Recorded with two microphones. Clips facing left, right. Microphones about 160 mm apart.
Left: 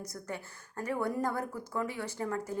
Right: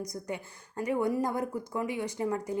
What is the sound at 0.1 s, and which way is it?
Speech, 15° right (ahead or behind).